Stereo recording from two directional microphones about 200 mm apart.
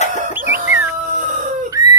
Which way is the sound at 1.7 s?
20° right (ahead or behind).